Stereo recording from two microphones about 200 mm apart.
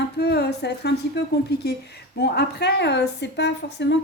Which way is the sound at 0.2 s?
55° left (ahead or behind).